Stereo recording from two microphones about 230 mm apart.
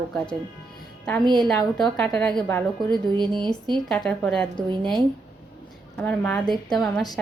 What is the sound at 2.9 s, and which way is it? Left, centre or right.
Speech, centre.